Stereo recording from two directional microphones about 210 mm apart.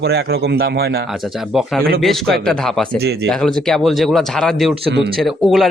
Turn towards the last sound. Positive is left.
turn(degrees=0)  # may be behind; listen again after turning